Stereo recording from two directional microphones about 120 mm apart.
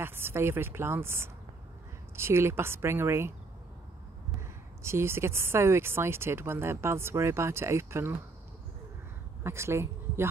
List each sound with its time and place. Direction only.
0.0 s speech: 20° right (ahead or behind)
4.8 s speech: 20° right (ahead or behind)
9.4 s speech: 20° right (ahead or behind)